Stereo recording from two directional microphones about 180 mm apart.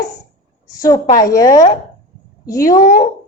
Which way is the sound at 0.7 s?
20° left (ahead or behind).